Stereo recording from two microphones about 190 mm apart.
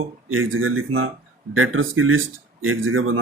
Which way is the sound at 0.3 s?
90° right.